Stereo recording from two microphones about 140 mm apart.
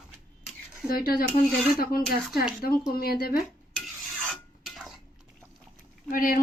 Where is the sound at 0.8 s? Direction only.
90° left.